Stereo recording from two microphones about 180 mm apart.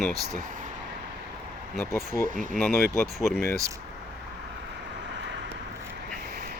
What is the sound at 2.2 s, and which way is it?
Speech, 45° right (ahead or behind).